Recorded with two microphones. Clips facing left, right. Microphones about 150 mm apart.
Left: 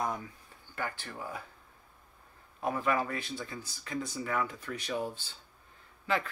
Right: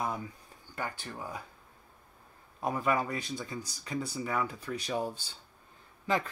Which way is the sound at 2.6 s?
15° right (ahead or behind).